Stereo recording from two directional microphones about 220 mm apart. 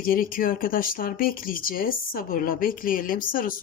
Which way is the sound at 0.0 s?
40° left (ahead or behind).